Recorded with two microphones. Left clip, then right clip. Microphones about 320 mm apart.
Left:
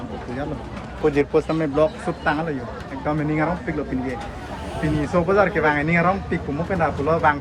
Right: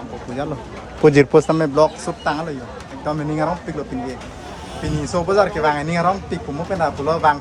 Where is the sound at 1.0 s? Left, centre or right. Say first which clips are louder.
Right 7 dB; right; by 3.5 s centre.